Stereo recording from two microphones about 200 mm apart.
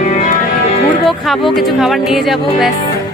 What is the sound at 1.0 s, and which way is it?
Speech, centre (ahead or behind).